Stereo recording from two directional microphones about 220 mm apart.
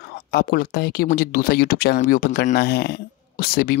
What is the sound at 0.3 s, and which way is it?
Speech, 45° left (ahead or behind).